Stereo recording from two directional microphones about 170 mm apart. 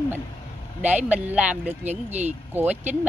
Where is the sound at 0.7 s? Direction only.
10° right (ahead or behind).